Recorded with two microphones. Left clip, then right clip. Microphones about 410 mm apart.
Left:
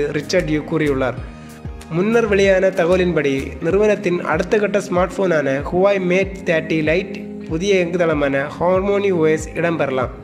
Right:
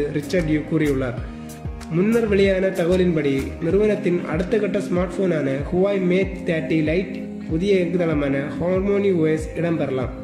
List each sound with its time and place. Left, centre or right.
0.1 s speech: centre